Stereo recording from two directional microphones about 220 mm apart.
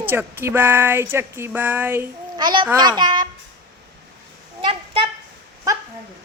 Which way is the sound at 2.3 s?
20° right (ahead or behind).